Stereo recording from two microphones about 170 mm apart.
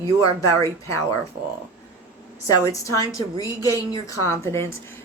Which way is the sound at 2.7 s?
20° left (ahead or behind).